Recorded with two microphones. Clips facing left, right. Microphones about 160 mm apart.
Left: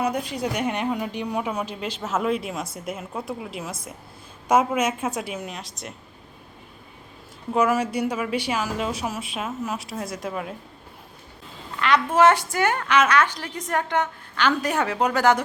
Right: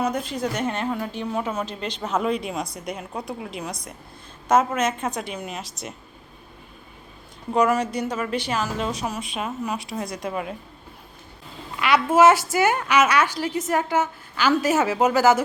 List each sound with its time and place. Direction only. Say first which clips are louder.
0.0 s a woman's voice: even; 10° left (ahead or behind)
7.5 s a woman's voice: right 1 dB; 5° left (ahead or behind)
11.8 s a woman's voice: right 2 dB; 10° right (ahead or behind)